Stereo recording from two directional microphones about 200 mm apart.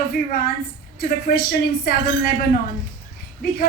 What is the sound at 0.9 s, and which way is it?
A man's voice, 50° left (ahead or behind).